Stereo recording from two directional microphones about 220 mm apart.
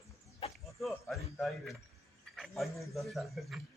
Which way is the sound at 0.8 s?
Centre (ahead or behind).